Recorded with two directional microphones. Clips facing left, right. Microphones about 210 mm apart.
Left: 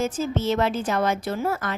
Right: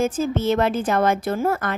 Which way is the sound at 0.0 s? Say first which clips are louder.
Right 3 dB; 50° right (ahead or behind).